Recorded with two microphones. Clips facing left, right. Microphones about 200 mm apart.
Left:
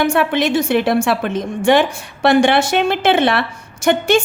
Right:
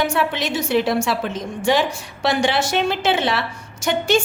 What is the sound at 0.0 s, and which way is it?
A woman's voice, 55° left (ahead or behind).